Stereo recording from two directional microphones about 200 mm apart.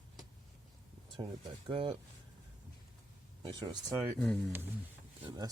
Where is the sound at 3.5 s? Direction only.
20° right (ahead or behind).